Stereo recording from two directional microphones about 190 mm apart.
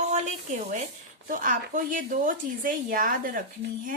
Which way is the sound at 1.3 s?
45° right (ahead or behind).